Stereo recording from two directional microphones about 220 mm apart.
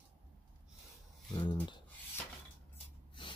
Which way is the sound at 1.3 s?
20° left (ahead or behind).